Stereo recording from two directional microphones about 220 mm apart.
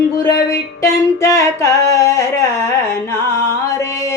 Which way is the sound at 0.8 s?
15° left (ahead or behind).